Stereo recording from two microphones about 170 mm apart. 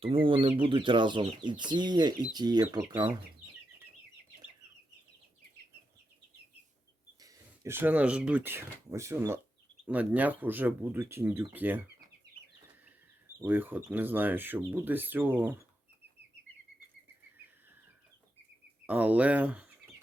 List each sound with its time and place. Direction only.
0.0 s speech: 30° right (ahead or behind)
7.2 s speech: 15° right (ahead or behind)
12.2 s chicken: 85° right
13.4 s speech: 10° right (ahead or behind)
18.9 s speech: 10° right (ahead or behind)